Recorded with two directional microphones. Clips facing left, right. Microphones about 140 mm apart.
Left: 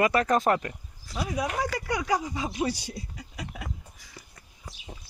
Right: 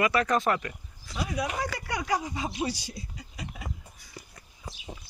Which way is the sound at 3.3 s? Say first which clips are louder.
Left 2 dB; 80° left.